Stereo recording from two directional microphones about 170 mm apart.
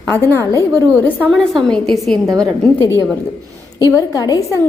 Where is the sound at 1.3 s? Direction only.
5° left (ahead or behind).